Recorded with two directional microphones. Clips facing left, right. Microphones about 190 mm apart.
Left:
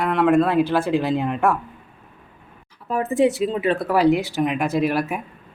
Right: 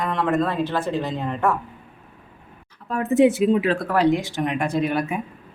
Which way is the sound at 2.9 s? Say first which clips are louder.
Right 2 dB; centre (ahead or behind).